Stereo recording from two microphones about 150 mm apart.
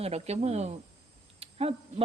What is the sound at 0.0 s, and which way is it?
Speech, 45° right (ahead or behind).